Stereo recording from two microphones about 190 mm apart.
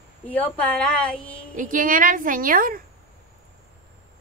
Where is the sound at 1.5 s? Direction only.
45° right (ahead or behind).